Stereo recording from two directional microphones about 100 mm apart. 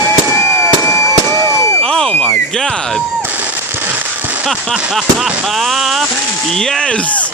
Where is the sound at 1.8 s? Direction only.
5° left (ahead or behind).